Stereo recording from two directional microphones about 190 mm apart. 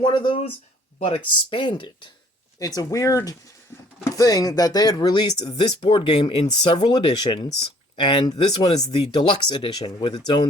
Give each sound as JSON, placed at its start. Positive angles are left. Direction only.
{"t": 0.0, "sound": "speech", "side_deg": 25}